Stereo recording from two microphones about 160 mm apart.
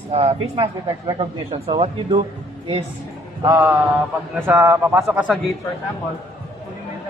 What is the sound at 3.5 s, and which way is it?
Mantra, 10° right (ahead or behind).